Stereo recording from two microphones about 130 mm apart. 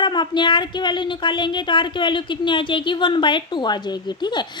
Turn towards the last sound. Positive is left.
turn(degrees=35)  # may be behind; listen again after turning